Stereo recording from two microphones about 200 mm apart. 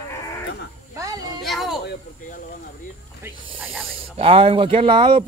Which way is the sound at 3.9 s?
30° right (ahead or behind).